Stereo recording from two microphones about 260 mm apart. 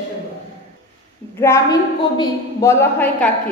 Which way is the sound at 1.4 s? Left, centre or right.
Centre.